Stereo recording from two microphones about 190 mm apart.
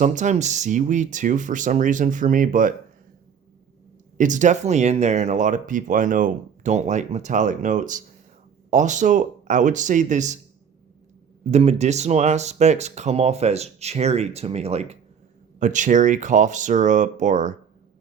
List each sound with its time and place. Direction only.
0.0 s speech: 40° right (ahead or behind)
4.2 s speech: 40° right (ahead or behind)
11.5 s speech: 35° right (ahead or behind)